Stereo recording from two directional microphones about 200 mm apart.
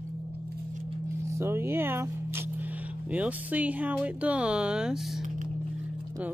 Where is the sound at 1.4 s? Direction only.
10° right (ahead or behind).